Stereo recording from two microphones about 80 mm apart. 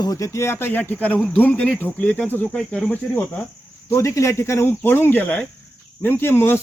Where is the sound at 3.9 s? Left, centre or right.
Left; by 5.5 s centre.